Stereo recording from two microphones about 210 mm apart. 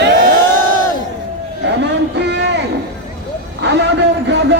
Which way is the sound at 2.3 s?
55° right (ahead or behind).